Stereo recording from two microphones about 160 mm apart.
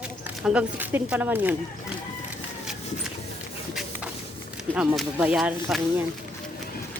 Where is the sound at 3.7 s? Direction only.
5° right (ahead or behind).